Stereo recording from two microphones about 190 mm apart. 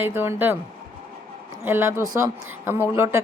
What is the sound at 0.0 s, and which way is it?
Speech, 10° right (ahead or behind).